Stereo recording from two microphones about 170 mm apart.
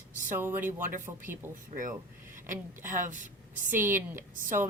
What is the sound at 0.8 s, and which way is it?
Speech, 55° right (ahead or behind).